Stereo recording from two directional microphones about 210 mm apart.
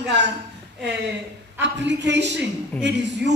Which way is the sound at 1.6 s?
55° right (ahead or behind).